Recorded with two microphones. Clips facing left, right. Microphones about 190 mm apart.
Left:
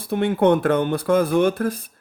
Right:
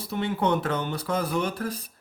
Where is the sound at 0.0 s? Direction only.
50° left (ahead or behind).